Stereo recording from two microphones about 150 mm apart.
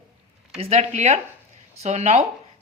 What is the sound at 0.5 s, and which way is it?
A woman's voice, 45° right (ahead or behind).